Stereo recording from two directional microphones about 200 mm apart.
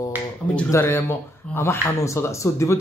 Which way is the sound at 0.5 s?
10° left (ahead or behind).